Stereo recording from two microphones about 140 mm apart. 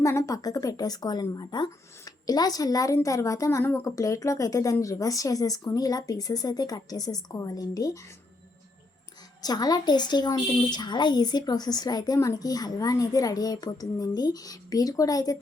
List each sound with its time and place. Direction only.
0.0 s a woman's voice: 20° left (ahead or behind)
9.4 s a woman's voice: 30° left (ahead or behind)